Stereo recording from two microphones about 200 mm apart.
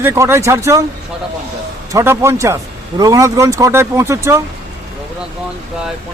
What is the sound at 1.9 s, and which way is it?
A man's voice, 15° right (ahead or behind).